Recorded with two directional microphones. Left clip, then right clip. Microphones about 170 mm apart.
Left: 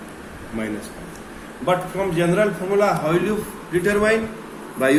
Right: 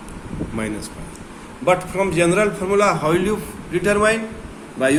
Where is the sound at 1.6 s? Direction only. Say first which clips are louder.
Right 3 dB; 65° right (ahead or behind).